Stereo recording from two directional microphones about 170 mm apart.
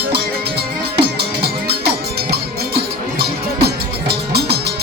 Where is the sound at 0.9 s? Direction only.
70° right (ahead or behind).